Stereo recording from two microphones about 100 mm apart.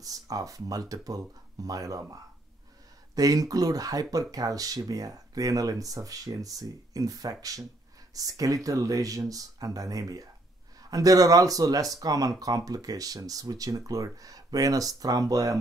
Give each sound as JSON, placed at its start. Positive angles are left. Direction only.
{"t": 0.0, "sound": "speech", "side_deg": -35}
{"t": 3.2, "sound": "speech", "side_deg": -35}